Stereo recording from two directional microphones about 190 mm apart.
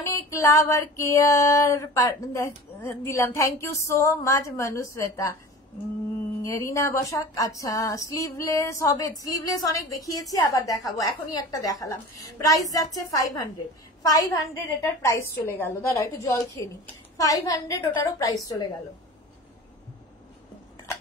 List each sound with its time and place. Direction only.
0.0 s female singing: 15° left (ahead or behind)
6.4 s female singing: 15° left (ahead or behind)
10.9 s a woman's voice: 20° left (ahead or behind)
14.0 s female singing: 20° left (ahead or behind)